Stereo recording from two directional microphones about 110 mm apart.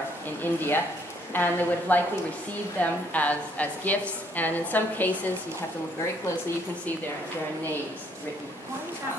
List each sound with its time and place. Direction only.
0.4 s a woman's voice: 20° left (ahead or behind)